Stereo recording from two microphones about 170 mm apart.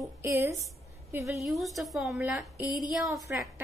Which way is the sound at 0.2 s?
15° right (ahead or behind).